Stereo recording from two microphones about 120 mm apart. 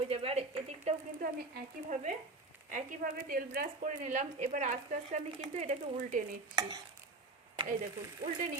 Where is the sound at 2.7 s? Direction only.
90° right.